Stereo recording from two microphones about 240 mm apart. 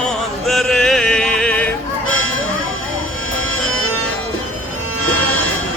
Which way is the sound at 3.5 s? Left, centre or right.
Left.